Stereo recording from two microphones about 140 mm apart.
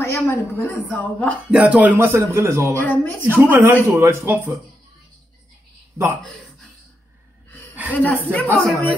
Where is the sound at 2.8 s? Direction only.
15° left (ahead or behind).